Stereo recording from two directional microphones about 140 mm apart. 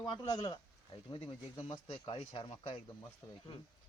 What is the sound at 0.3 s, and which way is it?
Speech, 30° left (ahead or behind).